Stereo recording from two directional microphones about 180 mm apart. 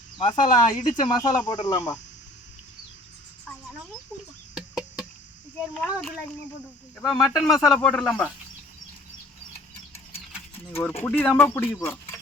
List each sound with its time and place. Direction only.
0.2 s speech: 45° left (ahead or behind)
1.0 s speech: 25° left (ahead or behind)
4.5 s chicken: 5° right (ahead or behind)
5.9 s speech: centre (ahead or behind)
10.8 s speech: 10° left (ahead or behind)